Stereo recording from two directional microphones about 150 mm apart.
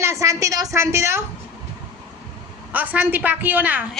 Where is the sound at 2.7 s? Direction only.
10° right (ahead or behind).